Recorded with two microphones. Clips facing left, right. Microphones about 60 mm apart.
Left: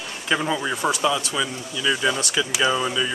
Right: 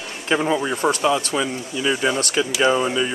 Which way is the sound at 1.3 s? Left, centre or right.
Right.